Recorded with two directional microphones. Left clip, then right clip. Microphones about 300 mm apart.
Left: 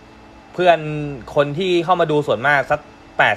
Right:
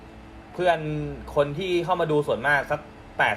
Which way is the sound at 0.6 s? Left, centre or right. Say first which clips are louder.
Left 8 dB; left.